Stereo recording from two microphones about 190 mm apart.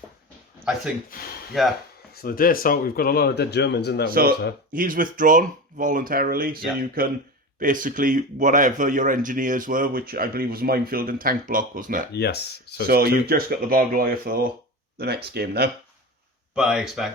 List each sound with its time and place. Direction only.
1.5 s speech: centre (ahead or behind)
2.1 s speech: 50° left (ahead or behind)
4.1 s speech: 50° right (ahead or behind)
12.1 s speech: 60° left (ahead or behind)
13.2 s speech: 55° right (ahead or behind)
16.6 s speech: 5° right (ahead or behind)